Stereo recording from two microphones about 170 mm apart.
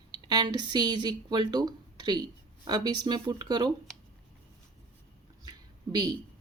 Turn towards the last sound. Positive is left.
turn(degrees=-25)  # may be behind; listen again after turning